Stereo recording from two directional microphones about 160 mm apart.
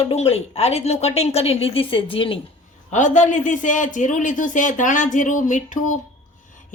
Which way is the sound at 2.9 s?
50° left (ahead or behind).